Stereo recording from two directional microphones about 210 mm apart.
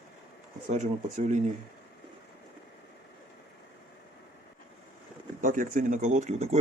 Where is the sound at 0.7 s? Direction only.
35° right (ahead or behind).